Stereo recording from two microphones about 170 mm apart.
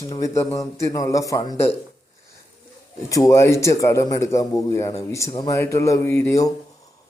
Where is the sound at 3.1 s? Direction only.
20° left (ahead or behind).